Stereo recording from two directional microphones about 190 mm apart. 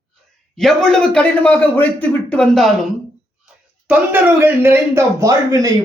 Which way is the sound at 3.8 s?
10° right (ahead or behind).